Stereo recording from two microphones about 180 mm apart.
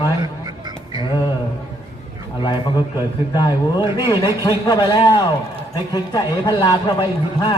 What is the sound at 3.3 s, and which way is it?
A man's voice, 25° left (ahead or behind).